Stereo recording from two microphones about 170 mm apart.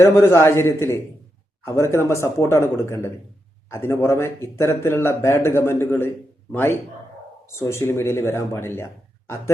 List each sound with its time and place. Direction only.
0.0 s speech: 15° left (ahead or behind)